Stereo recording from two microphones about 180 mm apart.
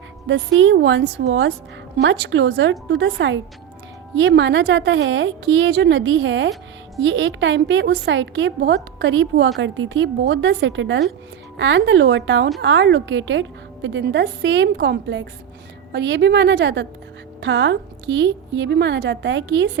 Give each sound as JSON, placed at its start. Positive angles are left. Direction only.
{"t": 0.3, "sound": "a woman's voice", "side_deg": -90}
{"t": 17.4, "sound": "a woman's voice", "side_deg": -90}